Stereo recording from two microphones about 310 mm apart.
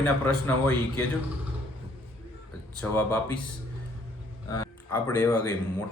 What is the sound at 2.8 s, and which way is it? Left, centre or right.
Speech, centre.